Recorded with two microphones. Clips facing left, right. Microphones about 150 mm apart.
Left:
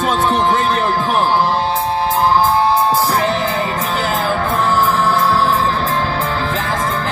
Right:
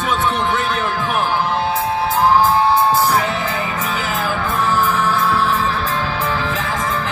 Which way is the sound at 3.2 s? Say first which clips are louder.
Left 4 dB; 35° left (ahead or behind).